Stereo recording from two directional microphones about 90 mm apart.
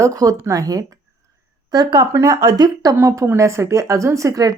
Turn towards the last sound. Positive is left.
turn(degrees=-40)  # may be behind; listen again after turning